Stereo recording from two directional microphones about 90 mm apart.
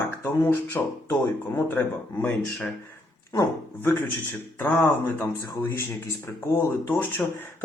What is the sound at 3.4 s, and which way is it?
Speech, 30° left (ahead or behind).